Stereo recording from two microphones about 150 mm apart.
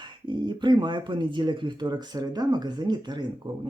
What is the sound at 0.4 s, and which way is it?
Speech, 30° right (ahead or behind).